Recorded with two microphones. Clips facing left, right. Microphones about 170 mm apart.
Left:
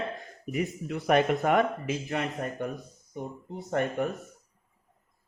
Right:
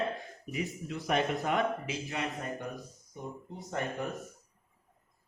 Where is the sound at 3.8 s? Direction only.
60° left (ahead or behind).